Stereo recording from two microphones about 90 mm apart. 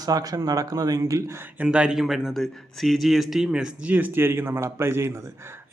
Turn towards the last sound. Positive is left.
turn(degrees=-30)  # may be behind; listen again after turning